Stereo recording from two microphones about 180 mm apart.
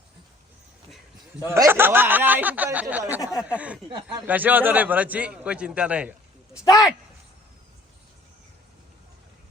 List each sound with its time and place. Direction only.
1.5 s a man's voice: 15° right (ahead or behind)
3.8 s speech: 25° right (ahead or behind)
4.3 s a man's voice: 10° right (ahead or behind)